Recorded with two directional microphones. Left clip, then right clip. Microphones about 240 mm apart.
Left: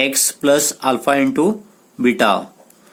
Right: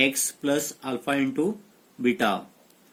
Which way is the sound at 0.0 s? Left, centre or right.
Left.